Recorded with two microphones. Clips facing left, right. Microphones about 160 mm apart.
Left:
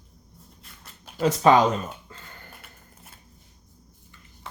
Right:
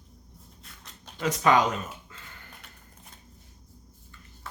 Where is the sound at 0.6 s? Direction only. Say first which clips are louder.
Even; 5° left (ahead or behind).